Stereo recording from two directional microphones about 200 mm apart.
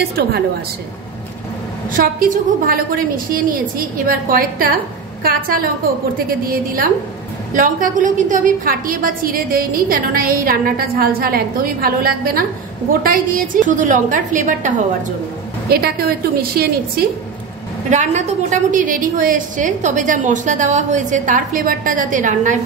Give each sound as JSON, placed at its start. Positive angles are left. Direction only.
{"t": 2.0, "sound": "a woman's voice", "side_deg": -45}
{"t": 15.7, "sound": "a woman's voice", "side_deg": -50}
{"t": 17.8, "sound": "a woman's voice", "side_deg": -35}